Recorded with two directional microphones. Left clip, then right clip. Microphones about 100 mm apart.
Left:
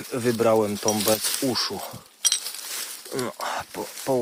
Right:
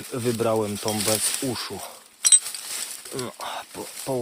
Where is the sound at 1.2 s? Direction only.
75° left (ahead or behind).